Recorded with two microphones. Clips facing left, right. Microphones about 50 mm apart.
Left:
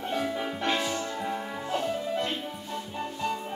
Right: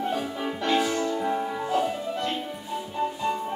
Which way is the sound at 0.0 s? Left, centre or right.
Centre.